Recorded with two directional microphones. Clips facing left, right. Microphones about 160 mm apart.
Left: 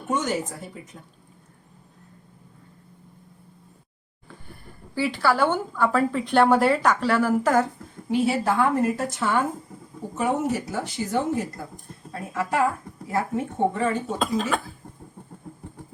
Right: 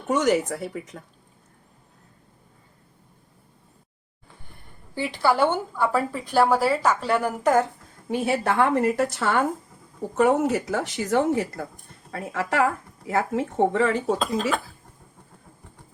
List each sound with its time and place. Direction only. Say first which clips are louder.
0.1 s speech: right 5 dB; 75° right (ahead or behind)
4.9 s a woman's voice: even; 15° right (ahead or behind)
7.1 s a woman's voice: even; 20° right (ahead or behind)
8.1 s speech: left 1 dB; 65° right (ahead or behind); by 14.0 s 90° right
14.2 s speech: even; centre (ahead or behind)